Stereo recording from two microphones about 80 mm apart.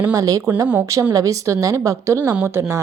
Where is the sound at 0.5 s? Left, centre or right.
Right.